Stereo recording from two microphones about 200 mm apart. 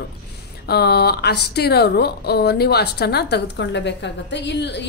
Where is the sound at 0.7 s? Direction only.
55° left (ahead or behind).